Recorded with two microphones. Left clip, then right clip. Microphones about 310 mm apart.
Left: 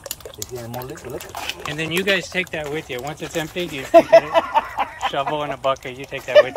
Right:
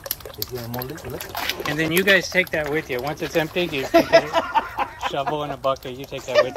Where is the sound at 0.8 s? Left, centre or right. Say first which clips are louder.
Left 1 dB; centre.